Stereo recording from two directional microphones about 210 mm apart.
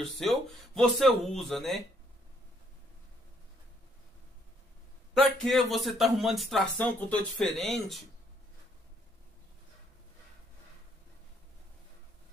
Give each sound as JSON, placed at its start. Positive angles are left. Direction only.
{"t": 0.0, "sound": "speech", "side_deg": 0}
{"t": 5.4, "sound": "speech", "side_deg": 0}